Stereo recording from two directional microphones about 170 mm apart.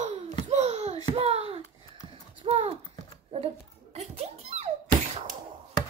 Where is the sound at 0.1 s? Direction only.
40° right (ahead or behind).